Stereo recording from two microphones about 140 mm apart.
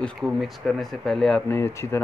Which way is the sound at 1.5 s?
20° left (ahead or behind).